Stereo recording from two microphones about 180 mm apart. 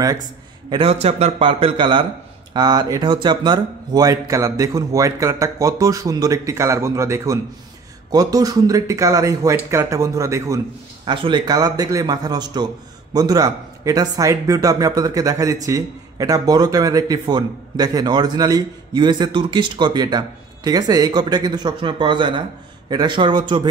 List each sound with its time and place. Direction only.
0.0 s a man's voice: 20° right (ahead or behind)
0.8 s speech: 35° right (ahead or behind)